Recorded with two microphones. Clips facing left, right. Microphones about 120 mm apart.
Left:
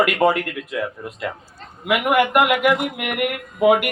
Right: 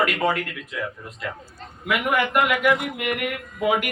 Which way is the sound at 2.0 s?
55° left (ahead or behind).